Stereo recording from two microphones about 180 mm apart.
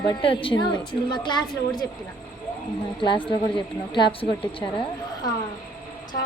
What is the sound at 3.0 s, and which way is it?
A woman's voice, 25° left (ahead or behind).